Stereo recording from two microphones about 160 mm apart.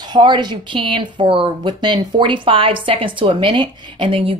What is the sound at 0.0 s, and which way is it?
A woman's voice, 25° right (ahead or behind).